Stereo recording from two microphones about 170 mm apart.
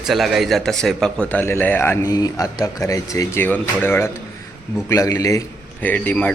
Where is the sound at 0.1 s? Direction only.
Centre (ahead or behind).